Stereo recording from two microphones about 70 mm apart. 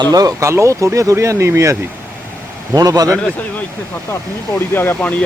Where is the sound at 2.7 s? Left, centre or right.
Right.